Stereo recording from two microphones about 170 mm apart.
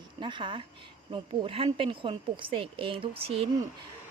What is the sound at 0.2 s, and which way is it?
A woman's voice, 30° right (ahead or behind).